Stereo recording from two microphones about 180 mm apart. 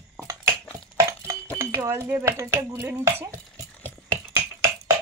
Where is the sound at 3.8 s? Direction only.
15° right (ahead or behind).